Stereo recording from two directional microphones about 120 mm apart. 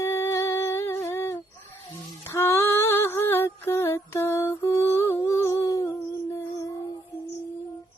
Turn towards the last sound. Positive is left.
turn(degrees=30)  # may be behind; listen again after turning